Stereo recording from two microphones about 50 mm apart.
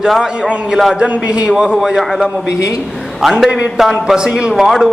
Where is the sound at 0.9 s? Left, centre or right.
Right.